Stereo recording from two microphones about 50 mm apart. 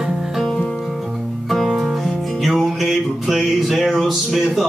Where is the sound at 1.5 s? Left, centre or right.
Centre.